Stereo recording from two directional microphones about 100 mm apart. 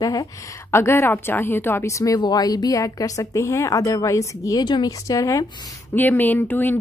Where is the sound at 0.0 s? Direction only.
40° left (ahead or behind).